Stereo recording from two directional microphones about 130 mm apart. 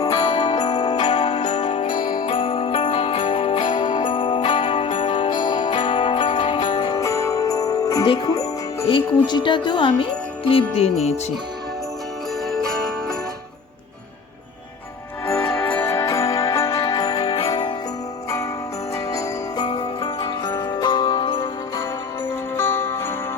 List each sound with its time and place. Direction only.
0.1 s music: 40° left (ahead or behind)
1.0 s jingle bell: 50° left (ahead or behind); by 8.0 s 25° left (ahead or behind)
8.0 s jingle bell: 35° left (ahead or behind)
8.9 s speech: 40° left (ahead or behind)
10.5 s music: 50° left (ahead or behind)
12.5 s jingle bell: 5° left (ahead or behind)
15.4 s music: 15° left (ahead or behind); by 17.3 s 30° left (ahead or behind)
17.4 s jingle bell: 35° left (ahead or behind)
19.1 s jingle bell: 35° left (ahead or behind)
22.6 s jingle bell: 20° left (ahead or behind)